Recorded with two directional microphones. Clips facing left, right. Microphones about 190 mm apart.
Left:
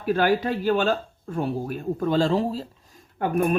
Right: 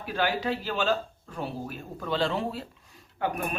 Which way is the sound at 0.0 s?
50° left (ahead or behind).